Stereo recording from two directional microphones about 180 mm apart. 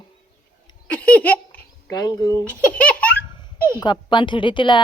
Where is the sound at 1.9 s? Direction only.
20° left (ahead or behind).